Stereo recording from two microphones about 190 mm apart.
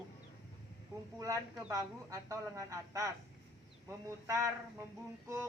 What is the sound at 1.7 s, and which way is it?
Speech, 15° right (ahead or behind).